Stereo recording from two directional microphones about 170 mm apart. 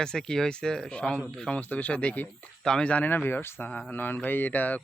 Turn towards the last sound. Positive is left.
turn(degrees=10)  # may be behind; listen again after turning